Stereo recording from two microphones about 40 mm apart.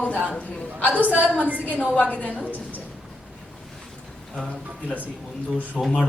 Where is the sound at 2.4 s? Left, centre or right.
Right.